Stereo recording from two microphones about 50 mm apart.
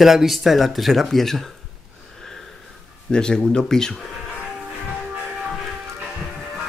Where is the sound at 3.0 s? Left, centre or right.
Centre.